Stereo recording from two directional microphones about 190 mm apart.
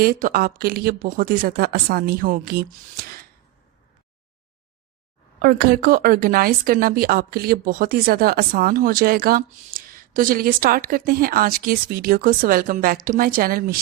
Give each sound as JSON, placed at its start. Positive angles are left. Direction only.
{"t": 0.0, "sound": "speech", "side_deg": -50}
{"t": 5.4, "sound": "speech", "side_deg": -50}